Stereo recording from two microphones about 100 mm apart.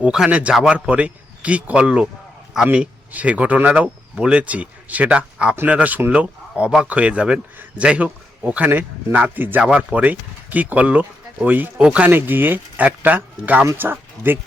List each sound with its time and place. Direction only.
0.0 s a man's voice: 10° right (ahead or behind)